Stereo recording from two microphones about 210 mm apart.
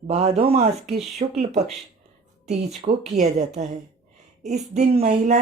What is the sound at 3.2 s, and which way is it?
Speech, 35° right (ahead or behind).